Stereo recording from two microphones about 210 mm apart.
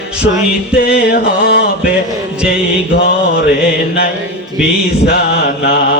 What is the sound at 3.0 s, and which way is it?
Mantra, 45° left (ahead or behind).